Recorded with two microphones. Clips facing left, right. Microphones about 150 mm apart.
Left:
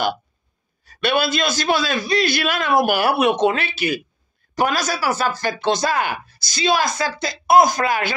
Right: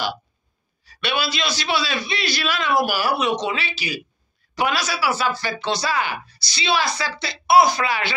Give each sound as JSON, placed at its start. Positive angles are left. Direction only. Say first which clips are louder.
{"t": 0.8, "sound": "speech", "louder": "left 5 dB", "side_deg": 50}